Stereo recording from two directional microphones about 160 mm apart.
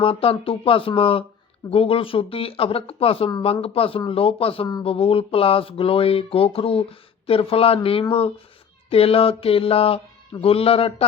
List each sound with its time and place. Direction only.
0.0 s speech: 35° left (ahead or behind)